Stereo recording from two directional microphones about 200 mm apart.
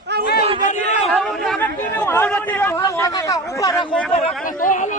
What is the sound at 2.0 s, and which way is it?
Speech, 10° left (ahead or behind).